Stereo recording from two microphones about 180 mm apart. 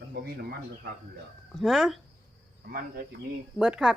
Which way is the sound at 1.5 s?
Centre (ahead or behind).